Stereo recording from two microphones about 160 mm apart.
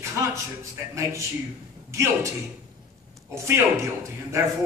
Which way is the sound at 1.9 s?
20° right (ahead or behind).